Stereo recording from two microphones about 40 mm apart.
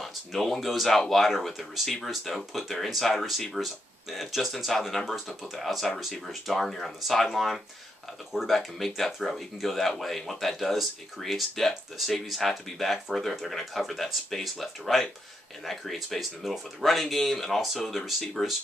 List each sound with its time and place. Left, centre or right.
0.0 s speech: centre
8.5 s speech: centre